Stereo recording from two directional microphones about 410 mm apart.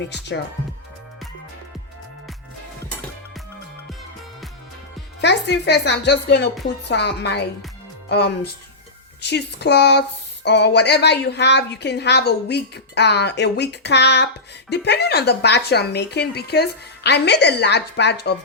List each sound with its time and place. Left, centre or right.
5.2 s a woman's voice: left